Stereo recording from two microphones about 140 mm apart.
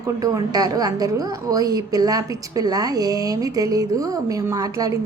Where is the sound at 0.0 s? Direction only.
25° right (ahead or behind).